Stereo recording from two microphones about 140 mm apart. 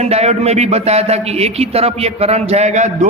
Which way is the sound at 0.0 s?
50° right (ahead or behind).